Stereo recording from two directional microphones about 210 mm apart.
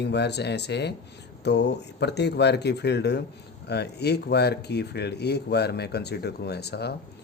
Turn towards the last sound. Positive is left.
turn(degrees=50)  # may be behind; listen again after turning